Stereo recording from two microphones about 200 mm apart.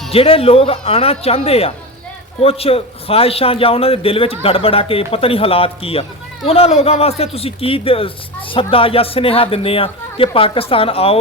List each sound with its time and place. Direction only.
0.1 s a man's voice: 30° left (ahead or behind)